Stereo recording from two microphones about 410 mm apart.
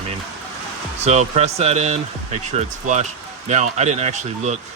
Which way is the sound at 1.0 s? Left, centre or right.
Centre.